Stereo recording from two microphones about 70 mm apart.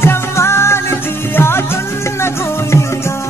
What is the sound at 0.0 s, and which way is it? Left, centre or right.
Music, left.